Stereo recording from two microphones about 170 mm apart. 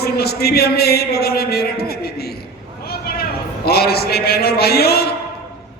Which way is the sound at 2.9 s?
65° left (ahead or behind).